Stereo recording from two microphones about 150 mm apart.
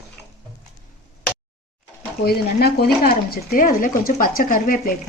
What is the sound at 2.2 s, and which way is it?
Speech, 90° left.